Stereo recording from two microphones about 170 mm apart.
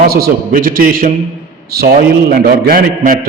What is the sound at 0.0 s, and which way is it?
A man's voice, 55° right (ahead or behind).